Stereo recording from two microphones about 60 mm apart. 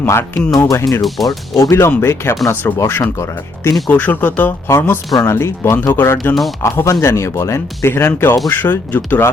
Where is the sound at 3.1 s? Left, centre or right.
Left.